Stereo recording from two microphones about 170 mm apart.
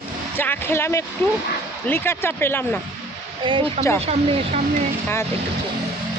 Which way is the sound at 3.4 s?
30° right (ahead or behind).